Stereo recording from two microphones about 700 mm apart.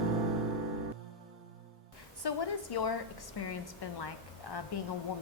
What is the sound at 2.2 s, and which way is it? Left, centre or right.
A woman's voice, left.